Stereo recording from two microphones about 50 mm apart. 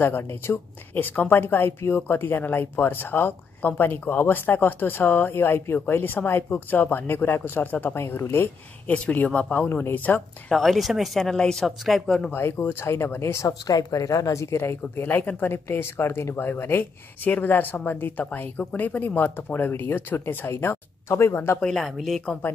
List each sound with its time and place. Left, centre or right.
0.2 s a woman's voice: left
0.9 s a woman's voice: left
8.8 s speech: left
9.8 s speech: left
10.5 s speech: centre
11.3 s a woman's voice: centre
11.6 s speech: centre
12.4 s speech: left
14.0 s speech: left
15.0 s a woman's voice: left
21.5 s a woman's voice: centre
21.8 s speech: centre